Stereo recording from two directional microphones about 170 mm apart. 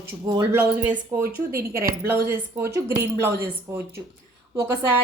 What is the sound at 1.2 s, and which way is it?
Speech, 60° right (ahead or behind).